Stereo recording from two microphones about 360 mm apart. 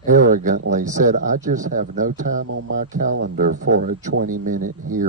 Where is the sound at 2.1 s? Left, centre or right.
Right.